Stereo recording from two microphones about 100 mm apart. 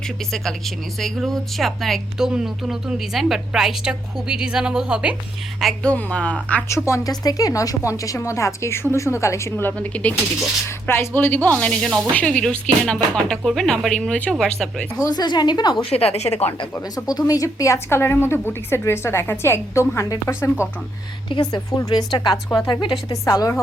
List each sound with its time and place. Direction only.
0.9 s speech: 5° left (ahead or behind)
5.9 s speech: 10° left (ahead or behind)
6.7 s a woman's voice: 30° left (ahead or behind)
11.8 s speech: centre (ahead or behind)
15.0 s a woman's voice: 45° left (ahead or behind)
15.9 s a woman's voice: 90° left
16.9 s a woman's voice: 40° left (ahead or behind)
21.5 s a woman's voice: 40° left (ahead or behind)